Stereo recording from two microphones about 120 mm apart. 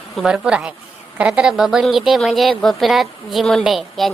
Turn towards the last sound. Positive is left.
turn(degrees=0)  # may be behind; listen again after turning